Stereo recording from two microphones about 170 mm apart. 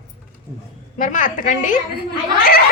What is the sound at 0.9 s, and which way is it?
A woman's voice, 50° left (ahead or behind).